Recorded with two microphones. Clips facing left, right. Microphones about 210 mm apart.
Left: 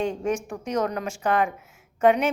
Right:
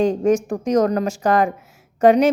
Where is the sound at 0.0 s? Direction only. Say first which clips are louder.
Right 9 dB; 40° right (ahead or behind).